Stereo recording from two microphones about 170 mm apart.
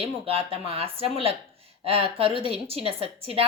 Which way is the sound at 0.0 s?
35° right (ahead or behind).